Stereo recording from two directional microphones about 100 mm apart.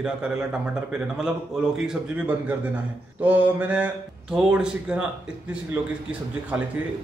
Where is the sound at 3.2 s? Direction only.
20° right (ahead or behind).